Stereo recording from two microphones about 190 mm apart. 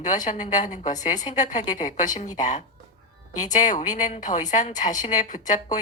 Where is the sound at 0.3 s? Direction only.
40° left (ahead or behind).